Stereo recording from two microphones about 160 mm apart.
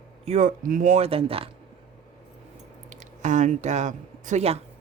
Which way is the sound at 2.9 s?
50° right (ahead or behind).